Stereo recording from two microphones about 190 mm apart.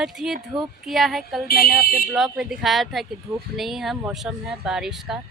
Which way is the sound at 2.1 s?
Centre (ahead or behind).